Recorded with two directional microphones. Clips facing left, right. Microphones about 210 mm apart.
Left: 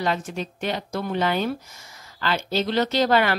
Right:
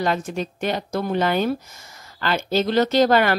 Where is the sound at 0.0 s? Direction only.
45° right (ahead or behind).